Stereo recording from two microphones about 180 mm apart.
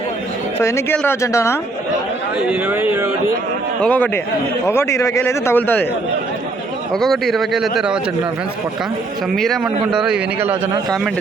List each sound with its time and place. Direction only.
0.6 s speech: 15° left (ahead or behind)
2.5 s speech: 10° right (ahead or behind)
3.8 s speech: 5° left (ahead or behind)
6.9 s a man's voice: centre (ahead or behind)
9.3 s a man's voice: centre (ahead or behind)